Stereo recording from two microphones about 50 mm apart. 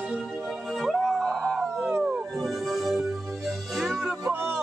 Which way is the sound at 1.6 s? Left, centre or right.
Centre.